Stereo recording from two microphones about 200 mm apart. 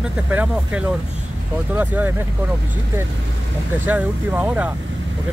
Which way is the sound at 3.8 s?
10° right (ahead or behind).